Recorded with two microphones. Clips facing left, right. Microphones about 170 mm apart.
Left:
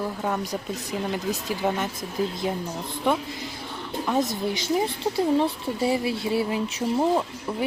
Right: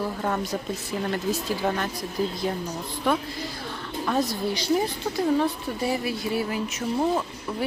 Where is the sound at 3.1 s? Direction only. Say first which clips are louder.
Even; 20° left (ahead or behind).